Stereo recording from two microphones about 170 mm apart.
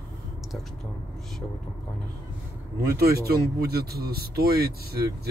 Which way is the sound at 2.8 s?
65° right (ahead or behind).